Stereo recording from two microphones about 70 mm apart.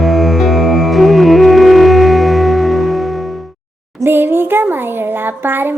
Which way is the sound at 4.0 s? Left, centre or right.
Right.